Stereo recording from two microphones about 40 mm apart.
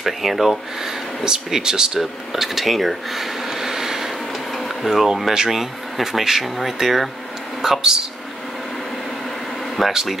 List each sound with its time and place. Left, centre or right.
0.0 s speech: centre
1.2 s speech: centre
4.6 s printer: centre
5.0 s speech: centre
7.6 s speech: centre
9.8 s speech: centre